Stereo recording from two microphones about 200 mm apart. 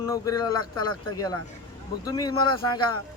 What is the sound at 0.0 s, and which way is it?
Speech, 15° left (ahead or behind).